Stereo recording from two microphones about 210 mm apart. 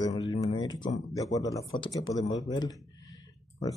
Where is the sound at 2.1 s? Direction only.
15° left (ahead or behind).